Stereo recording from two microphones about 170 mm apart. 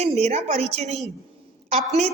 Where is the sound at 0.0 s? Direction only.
40° right (ahead or behind).